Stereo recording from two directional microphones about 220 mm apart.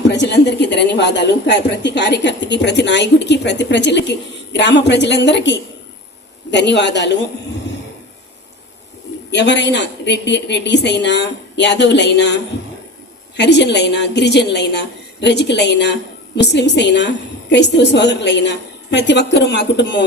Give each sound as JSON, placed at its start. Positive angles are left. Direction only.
{"t": 0.0, "sound": "a woman's voice", "side_deg": 50}
{"t": 9.3, "sound": "a woman's voice", "side_deg": 55}